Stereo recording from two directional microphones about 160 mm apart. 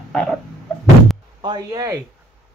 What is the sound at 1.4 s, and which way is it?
Speech, 25° right (ahead or behind).